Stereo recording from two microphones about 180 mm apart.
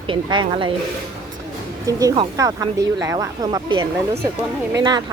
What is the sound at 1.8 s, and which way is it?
Speech, 25° right (ahead or behind).